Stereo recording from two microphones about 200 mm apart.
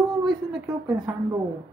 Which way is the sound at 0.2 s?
Centre (ahead or behind).